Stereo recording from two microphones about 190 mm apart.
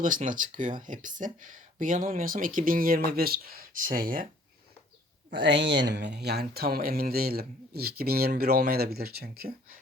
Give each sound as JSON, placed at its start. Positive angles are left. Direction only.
{"t": 0.0, "sound": "speech", "side_deg": -45}
{"t": 5.3, "sound": "speech", "side_deg": -65}